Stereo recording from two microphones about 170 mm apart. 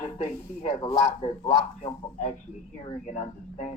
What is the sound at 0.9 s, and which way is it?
Speech, 40° left (ahead or behind).